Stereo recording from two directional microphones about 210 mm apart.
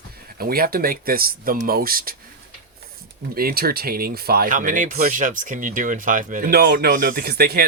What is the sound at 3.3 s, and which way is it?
Speech, 45° right (ahead or behind).